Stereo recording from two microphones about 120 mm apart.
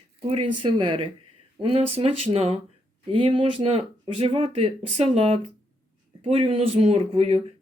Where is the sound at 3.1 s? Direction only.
45° right (ahead or behind).